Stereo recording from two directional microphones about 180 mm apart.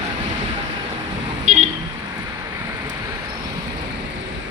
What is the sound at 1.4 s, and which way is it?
Vehicle, 40° right (ahead or behind).